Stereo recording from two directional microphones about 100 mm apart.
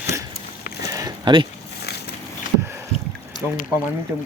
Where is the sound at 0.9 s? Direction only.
40° right (ahead or behind).